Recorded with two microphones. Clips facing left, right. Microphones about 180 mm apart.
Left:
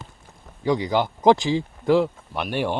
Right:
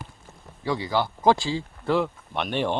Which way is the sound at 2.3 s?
5° left (ahead or behind).